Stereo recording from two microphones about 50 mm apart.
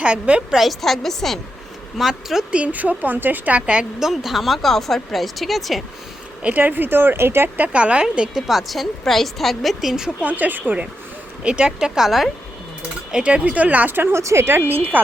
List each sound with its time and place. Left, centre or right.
0.0 s speech: right
0.5 s a woman's voice: centre
2.0 s speech: centre
2.5 s a woman's voice: right
4.0 s a woman's voice: centre
6.4 s speech: right
7.5 s a woman's voice: right
7.8 s a woman's voice: right
10.2 s a woman's voice: right
11.4 s speech: centre
13.2 s speech: right
14.1 s speech: right
14.7 s a woman's voice: right